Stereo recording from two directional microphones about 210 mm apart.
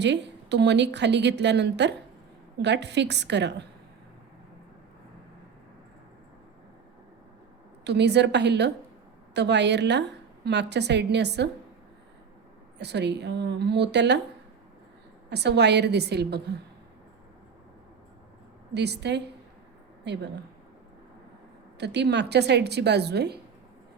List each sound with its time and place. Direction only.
0.0 s a woman's voice: 55° right (ahead or behind)
7.9 s a woman's voice: 55° right (ahead or behind)
12.8 s a woman's voice: 55° right (ahead or behind)
15.3 s a woman's voice: 55° right (ahead or behind)
18.7 s a woman's voice: 55° right (ahead or behind)
21.8 s a woman's voice: 55° right (ahead or behind)